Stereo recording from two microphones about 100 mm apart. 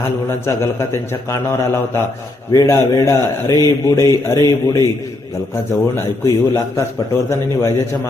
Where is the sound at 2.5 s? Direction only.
35° left (ahead or behind).